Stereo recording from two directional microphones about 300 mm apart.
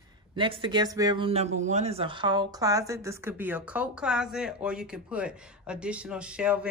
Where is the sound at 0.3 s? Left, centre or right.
Centre.